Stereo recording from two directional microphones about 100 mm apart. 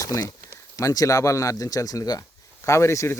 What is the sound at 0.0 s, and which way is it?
Speech, 35° left (ahead or behind).